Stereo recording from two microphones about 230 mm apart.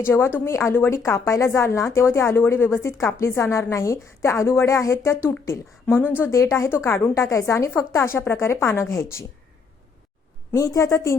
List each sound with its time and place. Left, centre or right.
0.0 s a woman's voice: centre
10.6 s a woman's voice: centre